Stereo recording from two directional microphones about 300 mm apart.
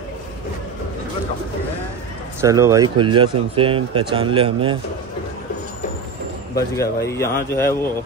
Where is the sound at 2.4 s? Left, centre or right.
Centre.